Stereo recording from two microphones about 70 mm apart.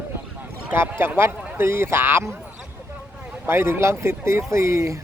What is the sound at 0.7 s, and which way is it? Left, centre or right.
Speech, right.